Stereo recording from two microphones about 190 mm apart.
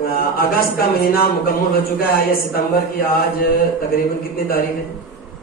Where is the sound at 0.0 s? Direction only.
50° left (ahead or behind).